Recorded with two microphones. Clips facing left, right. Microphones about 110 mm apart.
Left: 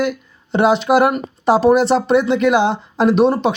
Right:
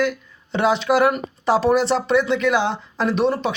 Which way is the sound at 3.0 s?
50° left (ahead or behind).